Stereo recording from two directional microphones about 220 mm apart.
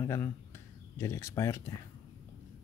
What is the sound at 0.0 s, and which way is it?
Speech, 10° left (ahead or behind).